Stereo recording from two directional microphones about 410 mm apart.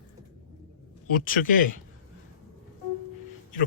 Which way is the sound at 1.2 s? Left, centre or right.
Centre.